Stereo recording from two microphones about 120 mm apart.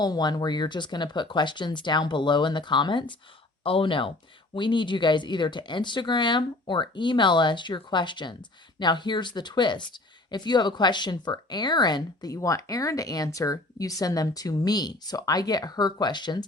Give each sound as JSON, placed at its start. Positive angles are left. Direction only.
{"t": 0.0, "sound": "speech", "side_deg": 35}